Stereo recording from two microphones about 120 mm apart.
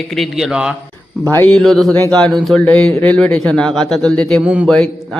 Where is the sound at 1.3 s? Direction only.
15° left (ahead or behind).